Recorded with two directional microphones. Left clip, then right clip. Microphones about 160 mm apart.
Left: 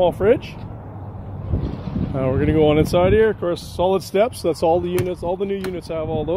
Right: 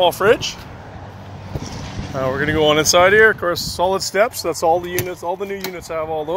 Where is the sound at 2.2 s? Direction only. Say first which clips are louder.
Right 1 dB; 40° left (ahead or behind).